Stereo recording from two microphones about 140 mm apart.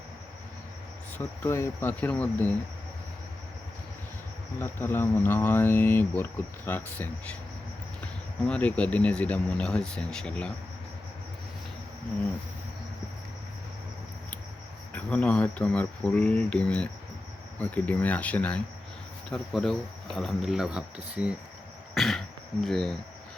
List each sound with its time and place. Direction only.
1.2 s speech: 15° left (ahead or behind)
4.6 s speech: 15° left (ahead or behind)
14.9 s speech: 10° left (ahead or behind); by 21.3 s 5° right (ahead or behind)
21.9 s a sound: centre (ahead or behind)
22.6 s speech: 5° left (ahead or behind)